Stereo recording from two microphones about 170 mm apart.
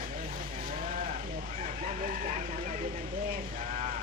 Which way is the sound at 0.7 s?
50° right (ahead or behind).